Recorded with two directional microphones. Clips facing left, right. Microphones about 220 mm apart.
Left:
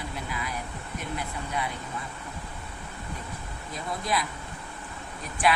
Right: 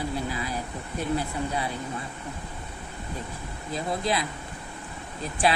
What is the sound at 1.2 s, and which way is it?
Speech, 30° right (ahead or behind).